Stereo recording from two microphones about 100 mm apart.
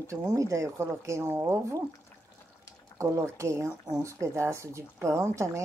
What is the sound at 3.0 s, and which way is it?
Speech, 30° right (ahead or behind).